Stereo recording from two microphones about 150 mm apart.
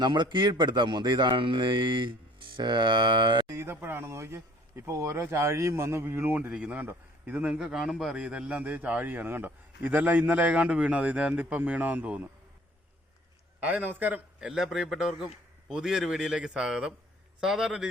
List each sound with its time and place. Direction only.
0.0 s speech: 30° right (ahead or behind)
3.5 s speech: 15° right (ahead or behind)
13.6 s a man's voice: 10° right (ahead or behind)